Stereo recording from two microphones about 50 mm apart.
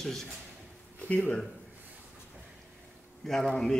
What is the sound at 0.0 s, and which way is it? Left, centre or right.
Speech, centre.